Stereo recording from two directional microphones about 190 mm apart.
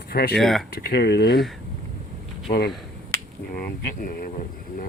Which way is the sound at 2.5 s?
55° left (ahead or behind).